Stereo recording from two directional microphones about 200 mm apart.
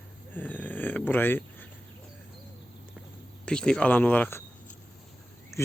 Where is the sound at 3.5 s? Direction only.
5° left (ahead or behind).